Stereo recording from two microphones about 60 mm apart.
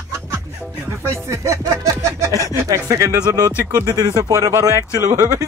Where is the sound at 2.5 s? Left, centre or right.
Right.